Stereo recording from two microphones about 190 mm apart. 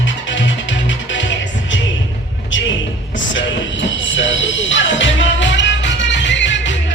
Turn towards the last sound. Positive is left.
turn(degrees=75)  # may be behind; listen again after turning